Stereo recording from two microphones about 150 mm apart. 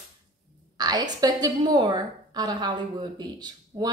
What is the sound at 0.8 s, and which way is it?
A woman's voice, 25° right (ahead or behind).